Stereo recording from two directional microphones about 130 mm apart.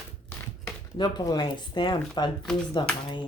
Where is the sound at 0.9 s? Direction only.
35° left (ahead or behind).